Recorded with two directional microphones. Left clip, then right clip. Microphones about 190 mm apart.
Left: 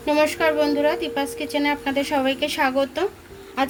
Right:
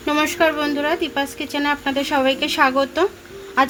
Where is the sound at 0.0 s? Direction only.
45° right (ahead or behind).